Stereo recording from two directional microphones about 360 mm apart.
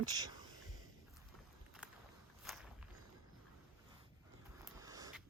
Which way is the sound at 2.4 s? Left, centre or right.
Centre.